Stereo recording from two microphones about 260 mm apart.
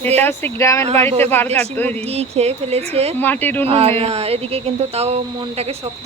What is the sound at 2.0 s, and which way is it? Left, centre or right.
Speech, right.